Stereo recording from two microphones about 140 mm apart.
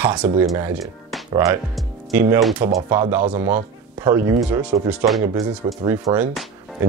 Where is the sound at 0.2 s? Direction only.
15° right (ahead or behind).